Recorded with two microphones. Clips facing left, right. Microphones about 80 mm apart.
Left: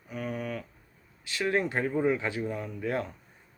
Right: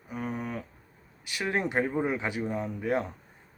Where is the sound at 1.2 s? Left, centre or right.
Centre.